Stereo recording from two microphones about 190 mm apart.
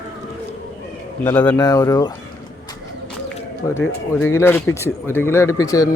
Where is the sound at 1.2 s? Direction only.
10° left (ahead or behind).